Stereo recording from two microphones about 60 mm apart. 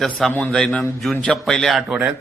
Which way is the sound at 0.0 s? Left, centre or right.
Centre.